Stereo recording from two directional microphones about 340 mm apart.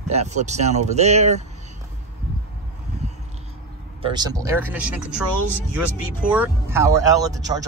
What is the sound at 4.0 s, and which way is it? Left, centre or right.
Speech, centre.